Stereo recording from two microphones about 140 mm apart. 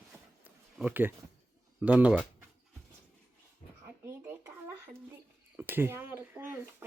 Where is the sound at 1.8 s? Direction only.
10° right (ahead or behind).